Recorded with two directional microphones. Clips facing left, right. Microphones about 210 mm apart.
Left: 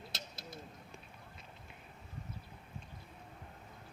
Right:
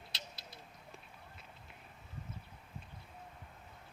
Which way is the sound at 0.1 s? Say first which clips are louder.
Left 4 dB; 50° left (ahead or behind).